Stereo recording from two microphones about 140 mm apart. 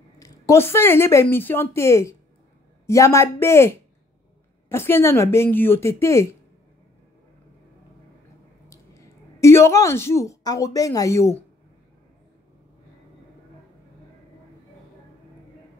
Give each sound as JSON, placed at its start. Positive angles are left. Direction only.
{"t": 0.2, "sound": "a woman's voice", "side_deg": 25}
{"t": 9.4, "sound": "a woman's voice", "side_deg": 20}